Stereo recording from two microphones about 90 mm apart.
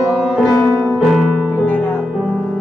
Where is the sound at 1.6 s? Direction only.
15° left (ahead or behind).